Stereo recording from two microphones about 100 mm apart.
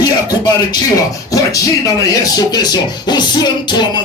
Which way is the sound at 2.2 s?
40° left (ahead or behind).